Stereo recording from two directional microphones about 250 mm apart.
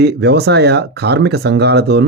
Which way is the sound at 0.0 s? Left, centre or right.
Right.